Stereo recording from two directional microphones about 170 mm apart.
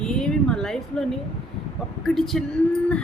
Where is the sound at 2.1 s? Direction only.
Centre (ahead or behind).